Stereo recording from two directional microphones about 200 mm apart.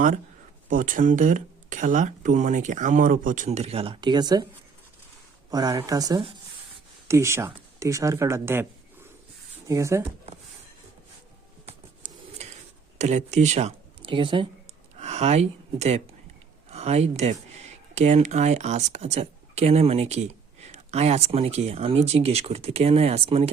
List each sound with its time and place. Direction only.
0.7 s speech: 40° right (ahead or behind); by 4.4 s 20° right (ahead or behind)
5.5 s speech: 20° right (ahead or behind)
11.6 s a sound: 30° right (ahead or behind)
13.0 s speech: 35° right (ahead or behind)